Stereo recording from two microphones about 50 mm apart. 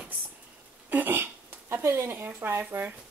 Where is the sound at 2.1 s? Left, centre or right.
Right.